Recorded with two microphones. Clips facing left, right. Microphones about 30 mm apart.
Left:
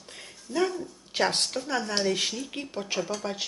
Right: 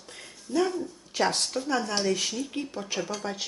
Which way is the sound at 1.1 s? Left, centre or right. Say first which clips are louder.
Even; left.